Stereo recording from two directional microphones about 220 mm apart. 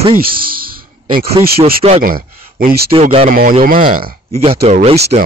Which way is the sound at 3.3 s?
40° right (ahead or behind).